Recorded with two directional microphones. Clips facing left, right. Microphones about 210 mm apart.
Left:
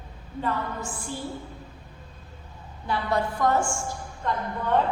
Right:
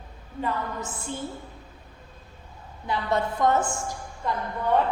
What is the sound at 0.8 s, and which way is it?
Speech, 20° right (ahead or behind).